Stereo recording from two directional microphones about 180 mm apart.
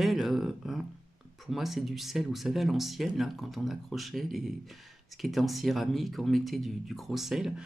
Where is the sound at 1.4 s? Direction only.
Centre (ahead or behind).